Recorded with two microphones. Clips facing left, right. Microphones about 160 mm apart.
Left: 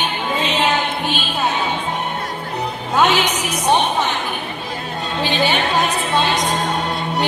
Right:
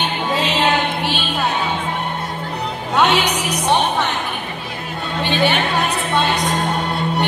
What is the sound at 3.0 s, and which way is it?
Speech, 70° right (ahead or behind).